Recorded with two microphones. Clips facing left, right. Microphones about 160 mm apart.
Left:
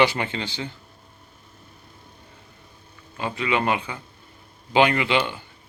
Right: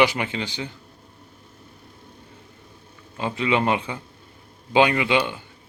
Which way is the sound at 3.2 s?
25° right (ahead or behind).